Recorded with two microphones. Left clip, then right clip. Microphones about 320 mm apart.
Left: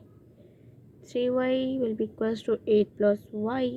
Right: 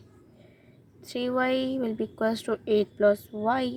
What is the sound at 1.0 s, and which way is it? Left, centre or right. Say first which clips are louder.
A woman's voice: left 1 dB; centre.